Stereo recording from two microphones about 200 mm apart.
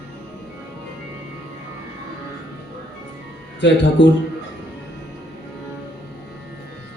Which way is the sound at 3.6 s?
60° left (ahead or behind).